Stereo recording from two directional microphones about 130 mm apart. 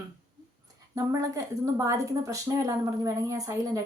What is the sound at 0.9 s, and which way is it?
A woman's voice, 25° right (ahead or behind).